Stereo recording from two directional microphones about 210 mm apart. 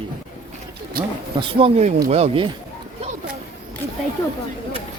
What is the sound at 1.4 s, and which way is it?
Speech, 25° right (ahead or behind).